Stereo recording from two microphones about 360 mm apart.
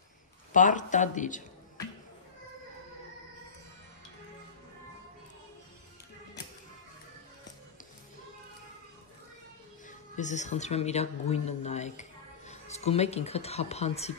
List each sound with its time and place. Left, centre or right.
0.5 s speech: left
9.8 s speech: centre